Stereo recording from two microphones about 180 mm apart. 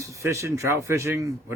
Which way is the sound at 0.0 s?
15° right (ahead or behind).